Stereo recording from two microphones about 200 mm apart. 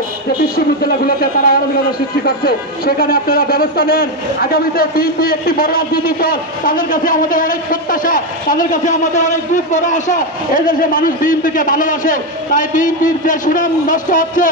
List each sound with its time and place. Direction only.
0.6 s a man's voice: 50° left (ahead or behind)